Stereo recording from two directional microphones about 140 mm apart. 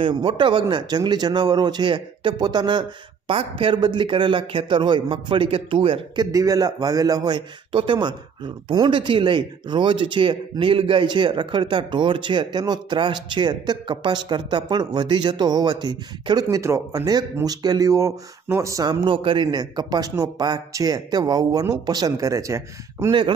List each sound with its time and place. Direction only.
0.0 s a man's voice: 35° right (ahead or behind)
19.0 s a man's voice: 35° right (ahead or behind); by 23.1 s 20° right (ahead or behind)